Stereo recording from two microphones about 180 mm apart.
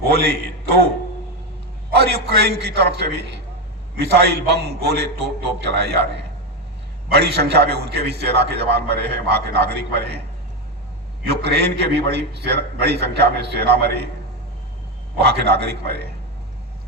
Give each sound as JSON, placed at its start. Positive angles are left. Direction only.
{"t": 0.0, "sound": "a man's voice", "side_deg": -60}
{"t": 2.0, "sound": "a man's voice", "side_deg": -65}
{"t": 7.1, "sound": "a man's voice", "side_deg": -65}
{"t": 11.3, "sound": "a man's voice", "side_deg": -65}
{"t": 15.2, "sound": "a man's voice", "side_deg": -65}